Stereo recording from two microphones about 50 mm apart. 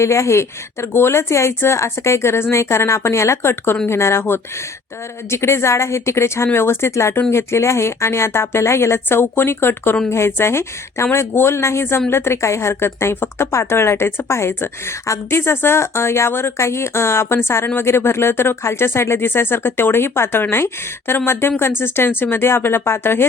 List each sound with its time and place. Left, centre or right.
0.0 s speech: left
15.3 s speech: left